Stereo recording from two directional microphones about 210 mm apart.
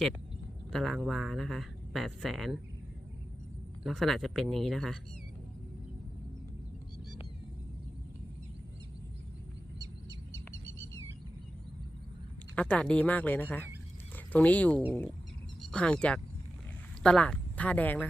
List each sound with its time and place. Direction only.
0.7 s speech: centre (ahead or behind)
3.8 s speech: centre (ahead or behind)
9.7 s bird: 15° right (ahead or behind)
12.5 s speech: 5° left (ahead or behind)